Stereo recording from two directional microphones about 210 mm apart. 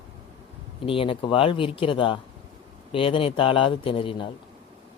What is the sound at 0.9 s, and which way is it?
A man's voice, 25° left (ahead or behind).